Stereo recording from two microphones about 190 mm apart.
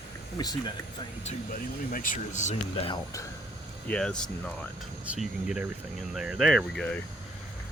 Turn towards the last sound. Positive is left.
turn(degrees=5)  # may be behind; listen again after turning